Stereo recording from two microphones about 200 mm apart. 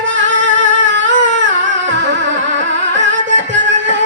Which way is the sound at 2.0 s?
65° right (ahead or behind).